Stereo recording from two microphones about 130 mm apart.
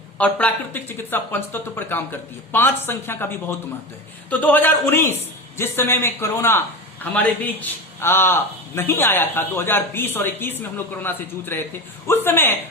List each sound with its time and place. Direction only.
0.2 s a man's voice: 10° left (ahead or behind)